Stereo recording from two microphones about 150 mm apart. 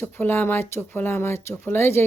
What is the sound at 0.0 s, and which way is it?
Speech, 15° left (ahead or behind).